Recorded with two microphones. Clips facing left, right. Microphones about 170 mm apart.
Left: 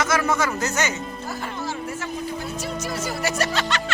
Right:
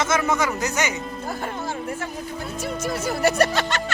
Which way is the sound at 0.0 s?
20° right (ahead or behind).